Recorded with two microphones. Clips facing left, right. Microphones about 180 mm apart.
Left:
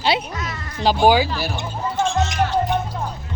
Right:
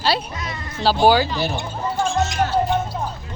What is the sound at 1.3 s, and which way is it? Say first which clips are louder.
Speech: right 2 dB; 20° right (ahead or behind).